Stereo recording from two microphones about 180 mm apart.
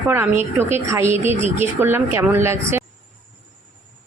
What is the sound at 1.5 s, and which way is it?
A woman's voice, 10° right (ahead or behind).